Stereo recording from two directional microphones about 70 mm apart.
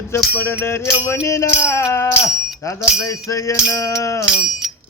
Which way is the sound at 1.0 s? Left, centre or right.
Left.